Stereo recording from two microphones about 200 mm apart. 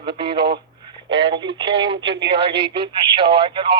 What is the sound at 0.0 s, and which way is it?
Speech, 25° right (ahead or behind).